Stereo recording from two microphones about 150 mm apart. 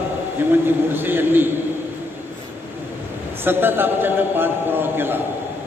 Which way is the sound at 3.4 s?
15° right (ahead or behind).